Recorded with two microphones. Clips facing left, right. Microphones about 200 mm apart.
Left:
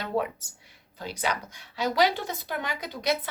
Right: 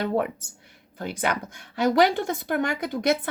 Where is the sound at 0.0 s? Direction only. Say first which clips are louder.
Right 4 dB; 55° right (ahead or behind).